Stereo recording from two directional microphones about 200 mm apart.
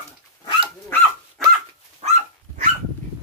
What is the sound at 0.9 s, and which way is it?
Dog, 10° left (ahead or behind).